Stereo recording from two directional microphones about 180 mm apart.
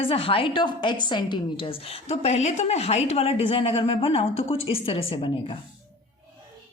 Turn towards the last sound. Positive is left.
turn(degrees=30)  # may be behind; listen again after turning